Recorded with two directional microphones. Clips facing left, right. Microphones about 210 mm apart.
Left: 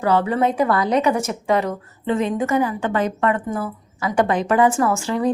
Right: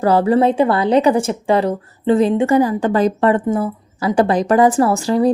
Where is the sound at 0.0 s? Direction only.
35° right (ahead or behind).